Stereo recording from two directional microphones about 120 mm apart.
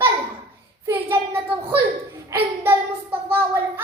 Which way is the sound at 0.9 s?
20° right (ahead or behind).